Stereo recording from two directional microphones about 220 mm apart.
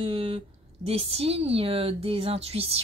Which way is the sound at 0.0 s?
25° right (ahead or behind).